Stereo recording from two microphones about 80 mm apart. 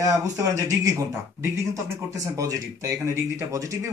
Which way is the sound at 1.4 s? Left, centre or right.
Right.